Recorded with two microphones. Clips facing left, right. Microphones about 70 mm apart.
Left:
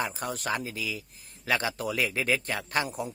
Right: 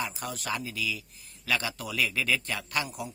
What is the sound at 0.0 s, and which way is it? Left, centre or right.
A man's voice, left.